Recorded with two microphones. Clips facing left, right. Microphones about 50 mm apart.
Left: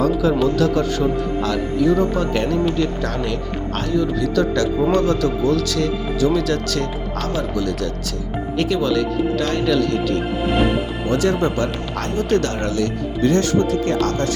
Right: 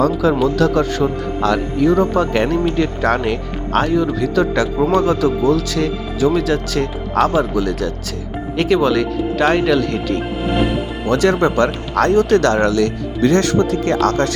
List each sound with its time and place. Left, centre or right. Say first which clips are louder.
0.0 s speech: right 2 dB; right
2.8 s speech: right 5 dB; right
4.2 s speech: right 2 dB; right
8.7 s speech: right 5 dB; right
11.1 s speech: right 4 dB; right